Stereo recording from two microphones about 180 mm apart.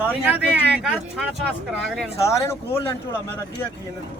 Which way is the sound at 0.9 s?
Centre (ahead or behind).